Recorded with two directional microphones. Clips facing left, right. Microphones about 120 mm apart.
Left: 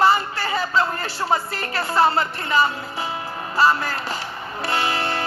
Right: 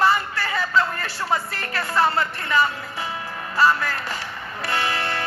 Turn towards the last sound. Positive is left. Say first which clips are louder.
# left 2 dB
turn(degrees=30)  # may be behind; listen again after turning